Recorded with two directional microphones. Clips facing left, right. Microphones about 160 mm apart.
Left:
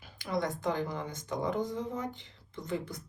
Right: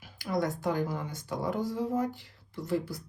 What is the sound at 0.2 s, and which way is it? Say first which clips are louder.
Speech: right 2 dB; 5° right (ahead or behind).